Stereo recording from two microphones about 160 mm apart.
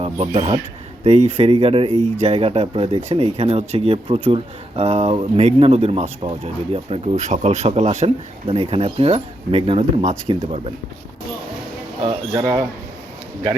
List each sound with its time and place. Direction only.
0.0 s speech: 35° right (ahead or behind)
12.3 s speech: 25° right (ahead or behind)